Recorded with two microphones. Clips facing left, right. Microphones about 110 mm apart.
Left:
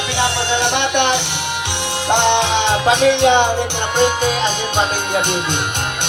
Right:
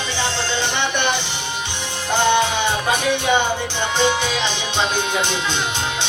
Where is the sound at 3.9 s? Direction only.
50° left (ahead or behind).